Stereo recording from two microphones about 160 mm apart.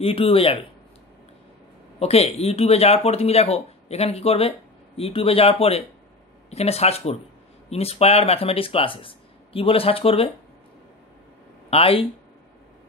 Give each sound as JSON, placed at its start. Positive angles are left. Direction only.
{"t": 0.0, "sound": "speech", "side_deg": 35}
{"t": 2.0, "sound": "speech", "side_deg": 40}
{"t": 11.7, "sound": "speech", "side_deg": 35}